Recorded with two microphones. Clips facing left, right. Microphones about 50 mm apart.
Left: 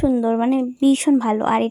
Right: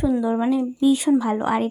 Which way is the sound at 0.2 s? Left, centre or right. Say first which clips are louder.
Left 3 dB; left.